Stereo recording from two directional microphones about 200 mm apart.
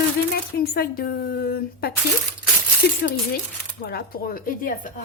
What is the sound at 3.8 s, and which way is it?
A woman's voice, 50° left (ahead or behind).